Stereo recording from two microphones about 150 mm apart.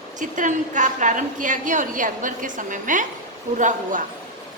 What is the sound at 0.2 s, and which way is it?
A woman's voice, 55° right (ahead or behind).